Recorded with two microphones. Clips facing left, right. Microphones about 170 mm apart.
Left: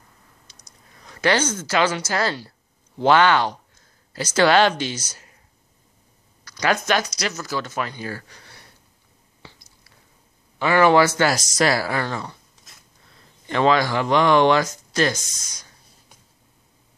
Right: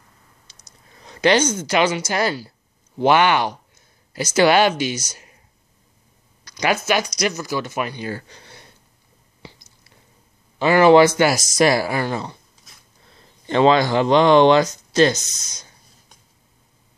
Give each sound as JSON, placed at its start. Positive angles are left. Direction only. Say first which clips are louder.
{"t": 0.5, "sound": "a sound", "louder": "right 1 dB", "side_deg": -25}
{"t": 3.0, "sound": "speech", "louder": "right 1 dB", "side_deg": -15}
{"t": 5.1, "sound": "a sound", "louder": "right 3 dB", "side_deg": -20}
{"t": 6.4, "sound": "a sound", "louder": "right 2 dB", "side_deg": -15}
{"t": 6.7, "sound": "speech", "louder": "right 1 dB", "side_deg": -5}
{"t": 7.9, "sound": "speech", "louder": "right 3 dB", "side_deg": -25}
{"t": 9.4, "sound": "chewing", "louder": "right 4 dB", "side_deg": -20}
{"t": 10.6, "sound": "a man's voice", "louder": "right 2 dB", "side_deg": -30}
{"t": 10.9, "sound": "speech", "louder": "right 5 dB", "side_deg": -20}
{"t": 13.5, "sound": "speech", "louder": "right 3 dB", "side_deg": -25}